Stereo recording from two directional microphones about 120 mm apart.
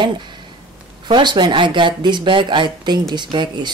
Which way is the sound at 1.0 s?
40° right (ahead or behind).